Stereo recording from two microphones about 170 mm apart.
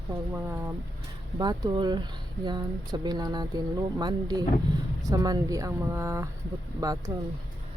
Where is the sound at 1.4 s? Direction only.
25° right (ahead or behind).